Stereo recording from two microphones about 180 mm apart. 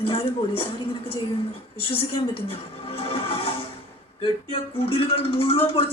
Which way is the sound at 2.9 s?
30° left (ahead or behind).